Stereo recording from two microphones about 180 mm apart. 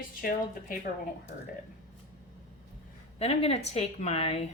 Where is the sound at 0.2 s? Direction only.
50° left (ahead or behind).